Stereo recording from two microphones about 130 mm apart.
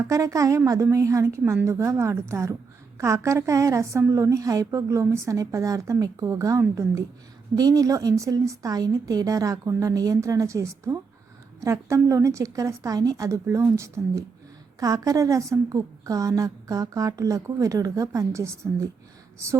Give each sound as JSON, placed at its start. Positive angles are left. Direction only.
{"t": 0.0, "sound": "a woman's voice", "side_deg": -25}